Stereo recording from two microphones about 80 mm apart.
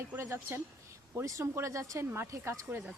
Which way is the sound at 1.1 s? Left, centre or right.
Right.